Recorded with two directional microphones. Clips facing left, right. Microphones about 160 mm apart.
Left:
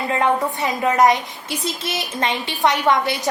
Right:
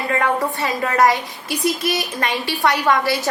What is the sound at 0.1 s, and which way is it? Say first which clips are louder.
A woman's voice: left 1 dB; 20° left (ahead or behind).